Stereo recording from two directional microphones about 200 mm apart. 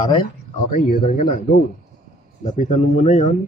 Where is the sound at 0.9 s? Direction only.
45° left (ahead or behind).